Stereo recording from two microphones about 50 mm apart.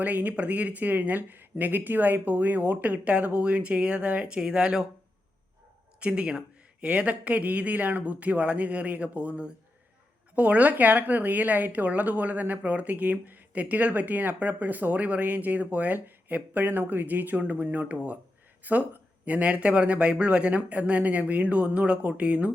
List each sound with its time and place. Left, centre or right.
0.0 s speech: right; by 4.9 s centre
6.0 s speech: right